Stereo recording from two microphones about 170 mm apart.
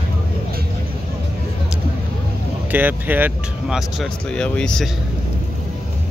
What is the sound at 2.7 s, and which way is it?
Speech, 10° right (ahead or behind).